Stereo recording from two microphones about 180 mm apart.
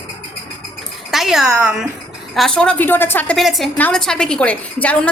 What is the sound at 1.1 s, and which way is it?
A woman's voice, centre (ahead or behind).